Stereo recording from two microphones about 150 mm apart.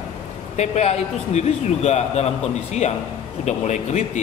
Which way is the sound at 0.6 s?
45° left (ahead or behind).